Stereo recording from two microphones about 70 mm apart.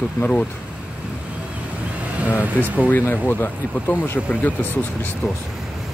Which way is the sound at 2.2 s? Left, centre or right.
Left.